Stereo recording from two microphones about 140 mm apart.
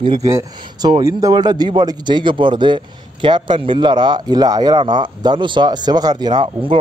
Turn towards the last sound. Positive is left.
turn(degrees=-35)  # may be behind; listen again after turning